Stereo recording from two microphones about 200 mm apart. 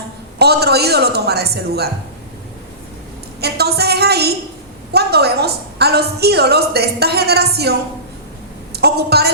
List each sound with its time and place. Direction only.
0.3 s a woman's voice: 55° right (ahead or behind)
3.4 s a woman's voice: 55° right (ahead or behind)
8.7 s a sound: 55° right (ahead or behind)